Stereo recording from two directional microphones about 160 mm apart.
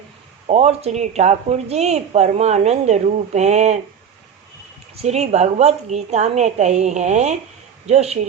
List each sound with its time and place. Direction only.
0.4 s a woman's voice: 45° right (ahead or behind)
4.9 s a woman's voice: 45° right (ahead or behind)